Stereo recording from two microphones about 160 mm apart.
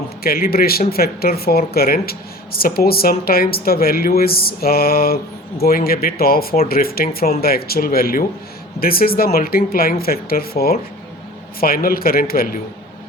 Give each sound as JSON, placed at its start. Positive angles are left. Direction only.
{"t": 0.2, "sound": "speech", "side_deg": 70}